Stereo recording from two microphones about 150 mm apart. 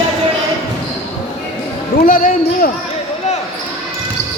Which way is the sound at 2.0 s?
65° left (ahead or behind).